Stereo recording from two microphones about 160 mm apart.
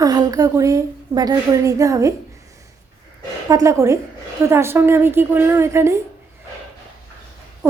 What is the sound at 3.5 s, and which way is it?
A woman's voice, 20° right (ahead or behind).